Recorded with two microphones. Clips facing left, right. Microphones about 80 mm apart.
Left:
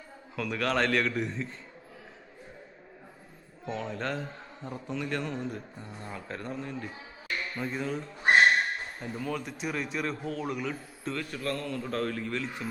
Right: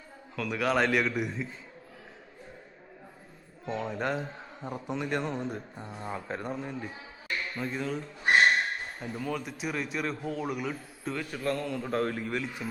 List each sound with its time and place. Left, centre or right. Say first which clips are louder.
0.3 s a man's voice: right 1 dB; centre
3.7 s a man's voice: right 2 dB; centre
7.5 s a man's voice: left 1 dB; centre